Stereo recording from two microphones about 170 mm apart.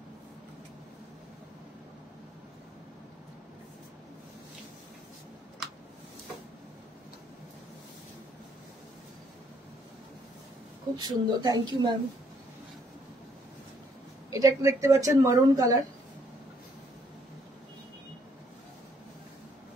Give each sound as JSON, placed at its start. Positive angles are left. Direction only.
{"t": 11.0, "sound": "speech", "side_deg": -25}
{"t": 14.3, "sound": "speech", "side_deg": -20}